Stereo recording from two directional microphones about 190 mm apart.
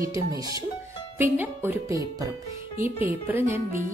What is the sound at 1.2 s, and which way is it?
Speech, 10° right (ahead or behind).